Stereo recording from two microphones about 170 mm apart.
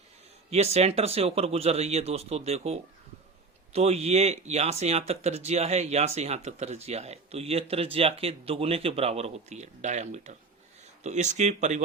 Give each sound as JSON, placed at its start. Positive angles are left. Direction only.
{"t": 0.5, "sound": "speech", "side_deg": -40}